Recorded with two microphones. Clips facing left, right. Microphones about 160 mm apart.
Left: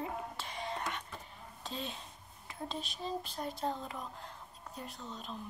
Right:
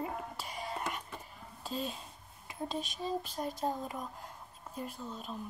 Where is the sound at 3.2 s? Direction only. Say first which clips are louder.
Right 2 dB; 45° right (ahead or behind).